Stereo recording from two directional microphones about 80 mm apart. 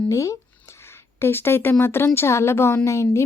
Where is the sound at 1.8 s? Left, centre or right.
Left.